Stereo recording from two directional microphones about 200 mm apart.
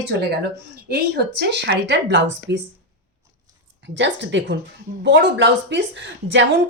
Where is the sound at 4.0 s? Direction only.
60° right (ahead or behind).